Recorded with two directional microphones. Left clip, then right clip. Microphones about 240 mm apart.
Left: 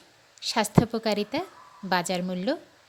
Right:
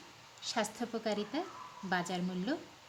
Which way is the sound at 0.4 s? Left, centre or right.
Left.